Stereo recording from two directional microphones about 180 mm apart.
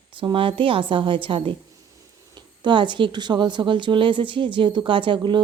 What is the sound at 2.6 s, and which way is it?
Speech, 25° right (ahead or behind).